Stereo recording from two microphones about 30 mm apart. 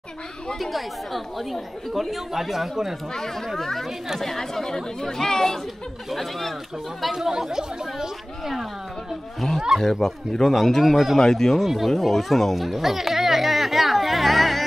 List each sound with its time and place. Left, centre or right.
0.6 s speech: centre
3.5 s speech: centre
6.0 s speech: centre
7.1 s speech: centre
9.4 s speech: centre
11.1 s speech: centre
11.6 s speech: centre
12.5 s a sound: centre